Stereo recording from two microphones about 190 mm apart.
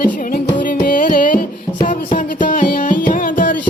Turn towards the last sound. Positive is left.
turn(degrees=45)  # may be behind; listen again after turning